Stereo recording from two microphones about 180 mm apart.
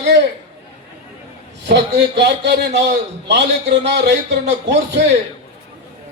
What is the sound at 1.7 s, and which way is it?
A man's voice, 70° right (ahead or behind).